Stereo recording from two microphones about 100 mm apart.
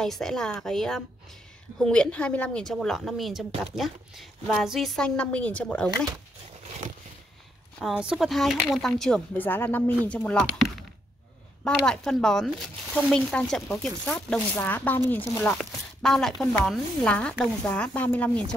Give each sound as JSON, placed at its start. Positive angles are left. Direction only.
{"t": 0.0, "sound": "speech", "side_deg": 5}
{"t": 7.8, "sound": "a woman's voice", "side_deg": -10}
{"t": 8.3, "sound": "speech", "side_deg": 0}
{"t": 9.4, "sound": "speech", "side_deg": 20}
{"t": 11.6, "sound": "speech", "side_deg": 5}
{"t": 14.5, "sound": "speech", "side_deg": 20}
{"t": 15.5, "sound": "speech", "side_deg": 5}